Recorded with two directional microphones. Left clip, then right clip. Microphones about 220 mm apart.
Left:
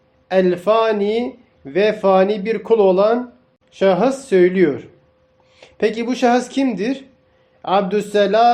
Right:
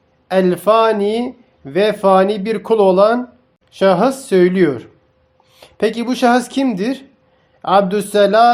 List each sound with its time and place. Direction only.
0.3 s speech: 30° right (ahead or behind)